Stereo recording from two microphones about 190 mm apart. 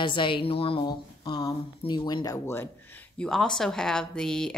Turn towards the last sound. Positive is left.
turn(degrees=5)  # may be behind; listen again after turning